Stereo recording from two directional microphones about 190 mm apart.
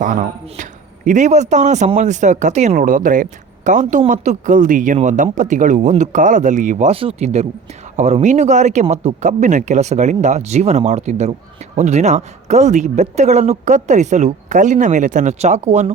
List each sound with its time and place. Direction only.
0.0 s speech: 40° right (ahead or behind)